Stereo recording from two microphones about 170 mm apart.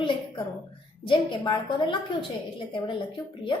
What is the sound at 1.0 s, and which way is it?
A woman's voice, 30° left (ahead or behind).